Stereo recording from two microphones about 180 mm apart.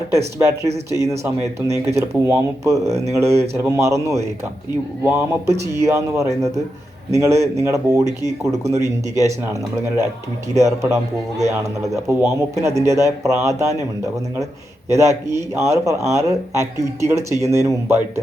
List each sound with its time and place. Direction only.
0.3 s speech: 15° right (ahead or behind)
9.2 s speech: 15° right (ahead or behind)
12.0 s speech: 15° right (ahead or behind)
14.8 s speech: 15° right (ahead or behind)